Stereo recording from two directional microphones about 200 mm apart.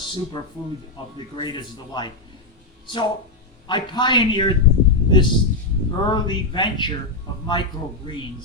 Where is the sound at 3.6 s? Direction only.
20° left (ahead or behind).